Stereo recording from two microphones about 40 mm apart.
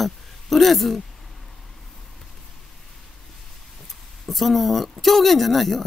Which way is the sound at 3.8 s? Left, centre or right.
Centre.